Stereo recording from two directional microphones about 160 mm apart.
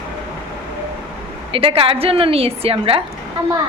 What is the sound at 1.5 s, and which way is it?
A woman's voice, 35° right (ahead or behind).